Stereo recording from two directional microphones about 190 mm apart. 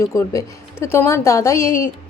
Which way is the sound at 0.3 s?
15° left (ahead or behind).